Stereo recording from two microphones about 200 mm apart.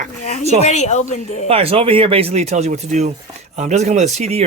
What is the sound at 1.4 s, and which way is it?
Speech, 30° right (ahead or behind).